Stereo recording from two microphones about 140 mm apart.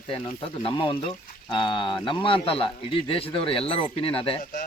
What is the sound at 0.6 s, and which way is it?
A man's voice, 40° left (ahead or behind).